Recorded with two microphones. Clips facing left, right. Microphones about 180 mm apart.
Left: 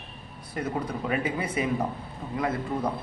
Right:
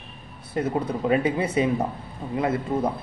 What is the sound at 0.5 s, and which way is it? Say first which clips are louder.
A man's voice: right 5 dB; 25° right (ahead or behind).